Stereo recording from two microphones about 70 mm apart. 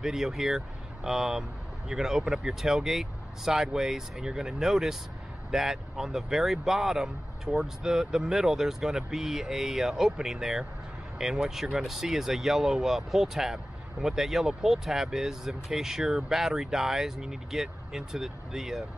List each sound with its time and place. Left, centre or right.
0.0 s speech: centre